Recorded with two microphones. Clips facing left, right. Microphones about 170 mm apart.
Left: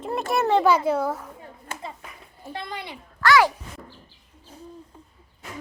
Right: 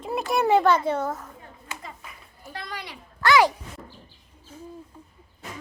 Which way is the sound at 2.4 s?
25° left (ahead or behind).